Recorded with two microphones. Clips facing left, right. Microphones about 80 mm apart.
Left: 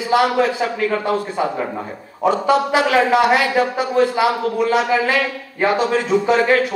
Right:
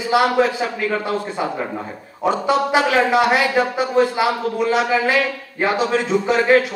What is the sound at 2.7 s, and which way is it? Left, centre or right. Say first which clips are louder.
A man's voice: even; centre.